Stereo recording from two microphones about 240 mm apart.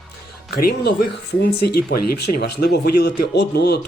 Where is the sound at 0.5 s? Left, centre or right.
Left.